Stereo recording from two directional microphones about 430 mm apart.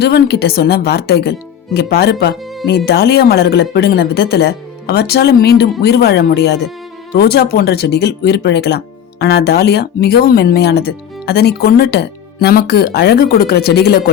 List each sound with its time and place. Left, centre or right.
0.0 s speech: left